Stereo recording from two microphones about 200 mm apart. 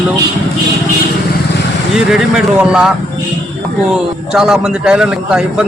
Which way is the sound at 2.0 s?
5° right (ahead or behind).